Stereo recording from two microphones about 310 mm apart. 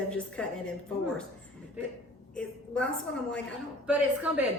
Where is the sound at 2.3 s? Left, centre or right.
Centre.